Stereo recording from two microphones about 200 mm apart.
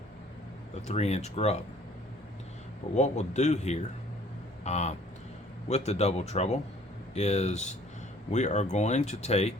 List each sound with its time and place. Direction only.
0.9 s speech: 35° left (ahead or behind)
2.9 s speech: 35° left (ahead or behind)